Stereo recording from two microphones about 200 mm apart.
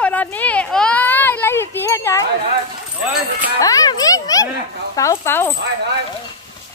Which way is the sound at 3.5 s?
15° left (ahead or behind).